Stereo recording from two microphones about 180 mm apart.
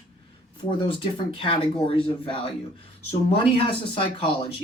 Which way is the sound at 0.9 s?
30° left (ahead or behind).